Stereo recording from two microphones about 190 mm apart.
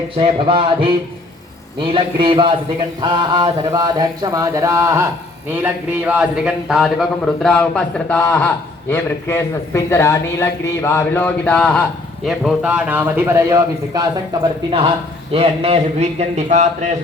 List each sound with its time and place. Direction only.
0.2 s speech: 25° right (ahead or behind)
1.9 s a man's voice: 25° right (ahead or behind)
15.3 s a man's voice: 30° right (ahead or behind)